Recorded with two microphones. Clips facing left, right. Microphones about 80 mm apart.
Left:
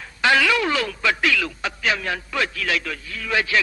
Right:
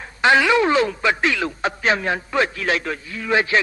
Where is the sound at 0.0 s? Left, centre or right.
Right.